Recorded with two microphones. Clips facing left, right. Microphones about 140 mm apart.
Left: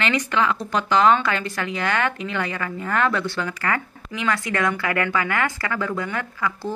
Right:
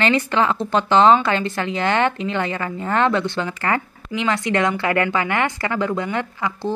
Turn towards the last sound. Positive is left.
turn(degrees=-20)  # may be behind; listen again after turning